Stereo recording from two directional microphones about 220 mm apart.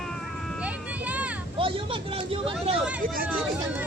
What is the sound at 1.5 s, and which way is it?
Speech, 25° right (ahead or behind).